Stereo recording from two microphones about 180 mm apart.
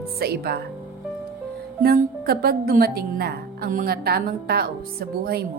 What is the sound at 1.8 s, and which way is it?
A woman's voice, 60° right (ahead or behind).